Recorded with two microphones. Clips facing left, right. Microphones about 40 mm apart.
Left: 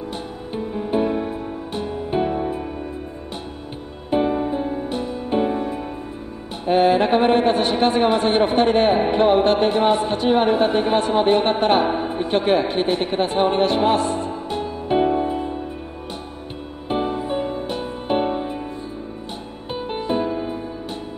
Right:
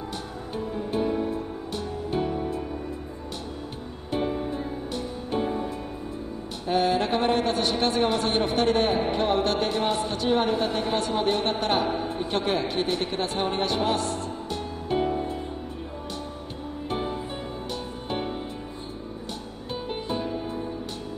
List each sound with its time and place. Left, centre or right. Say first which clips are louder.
0.5 s music: left 6 dB; left
4.1 s music: left 8 dB; left
6.6 s a woman's voice: left 7 dB; left
16.9 s music: left 9 dB; left
19.7 s music: left 7 dB; left